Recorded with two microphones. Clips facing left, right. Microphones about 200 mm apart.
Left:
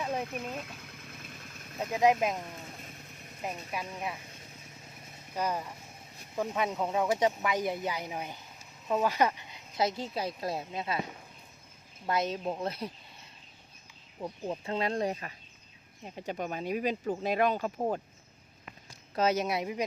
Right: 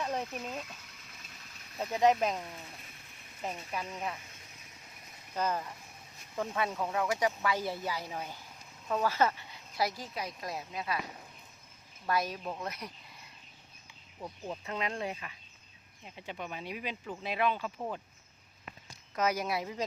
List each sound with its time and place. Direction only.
0.3 s engine: 55° left (ahead or behind)
2.0 s speech: 10° left (ahead or behind)
3.4 s speech: 10° left (ahead or behind)
5.3 s speech: 10° left (ahead or behind)
12.0 s speech: 20° left (ahead or behind)
14.2 s speech: 20° left (ahead or behind)
14.6 s speech: 30° left (ahead or behind)
19.1 s speech: 25° left (ahead or behind)